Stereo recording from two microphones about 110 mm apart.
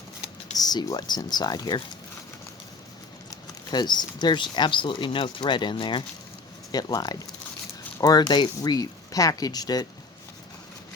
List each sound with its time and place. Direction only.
0.5 s speech: 35° left (ahead or behind)
3.2 s speech: 40° left (ahead or behind)
6.7 s speech: 35° left (ahead or behind)